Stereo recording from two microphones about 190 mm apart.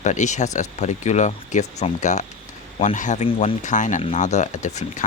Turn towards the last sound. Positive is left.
turn(degrees=40)  # may be behind; listen again after turning